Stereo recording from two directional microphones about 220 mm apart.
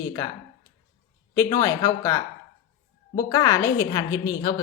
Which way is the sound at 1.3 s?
15° left (ahead or behind).